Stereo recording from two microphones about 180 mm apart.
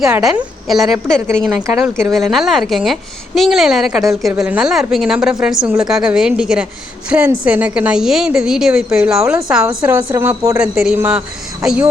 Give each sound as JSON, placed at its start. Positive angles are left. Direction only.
{"t": 0.0, "sound": "a woman's voice", "side_deg": 0}
{"t": 1.8, "sound": "a woman's voice", "side_deg": -15}
{"t": 2.1, "sound": "a woman's voice", "side_deg": 0}
{"t": 9.6, "sound": "a woman's voice", "side_deg": -15}
{"t": 10.6, "sound": "a woman's voice", "side_deg": -5}